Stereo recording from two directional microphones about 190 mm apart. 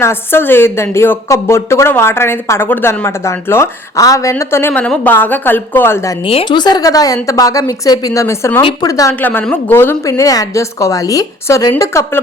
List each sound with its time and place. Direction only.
0.0 s a woman's voice: 10° left (ahead or behind)
6.2 s a woman's voice: 25° left (ahead or behind)